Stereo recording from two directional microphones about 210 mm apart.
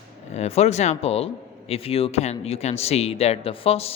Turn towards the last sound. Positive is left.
turn(degrees=30)  # may be behind; listen again after turning